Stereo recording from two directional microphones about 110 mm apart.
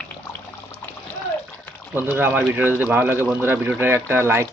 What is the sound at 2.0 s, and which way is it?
Speech, 20° right (ahead or behind).